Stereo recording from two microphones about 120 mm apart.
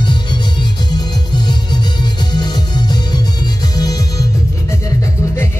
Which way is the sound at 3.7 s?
30° left (ahead or behind).